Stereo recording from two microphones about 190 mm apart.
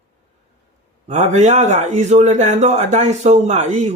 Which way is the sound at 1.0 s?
40° right (ahead or behind).